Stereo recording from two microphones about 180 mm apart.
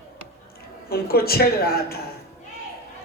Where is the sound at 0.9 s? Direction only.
60° left (ahead or behind).